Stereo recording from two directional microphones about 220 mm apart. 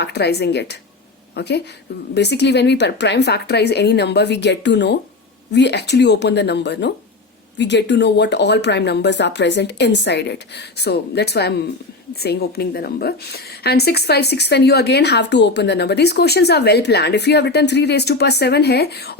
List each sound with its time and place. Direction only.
0.0 s a woman's voice: 50° left (ahead or behind)